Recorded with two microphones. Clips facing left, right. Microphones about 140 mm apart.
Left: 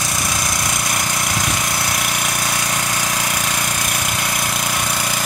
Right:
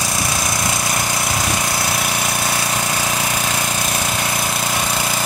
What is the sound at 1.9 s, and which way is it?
Jackhammer, 10° right (ahead or behind).